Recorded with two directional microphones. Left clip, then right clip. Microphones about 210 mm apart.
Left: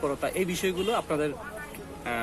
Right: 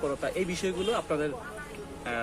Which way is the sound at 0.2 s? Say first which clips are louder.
Left 2 dB; 35° left (ahead or behind).